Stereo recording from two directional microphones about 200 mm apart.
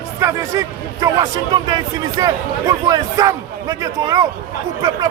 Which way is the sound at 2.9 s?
15° right (ahead or behind).